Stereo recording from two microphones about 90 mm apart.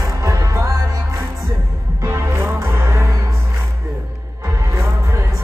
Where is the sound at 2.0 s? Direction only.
30° right (ahead or behind).